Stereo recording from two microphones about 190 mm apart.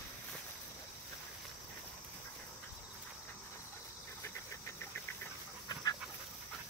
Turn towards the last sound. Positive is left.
turn(degrees=20)  # may be behind; listen again after turning